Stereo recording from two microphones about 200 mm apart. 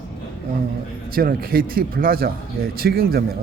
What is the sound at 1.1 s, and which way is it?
A man's voice, 45° right (ahead or behind).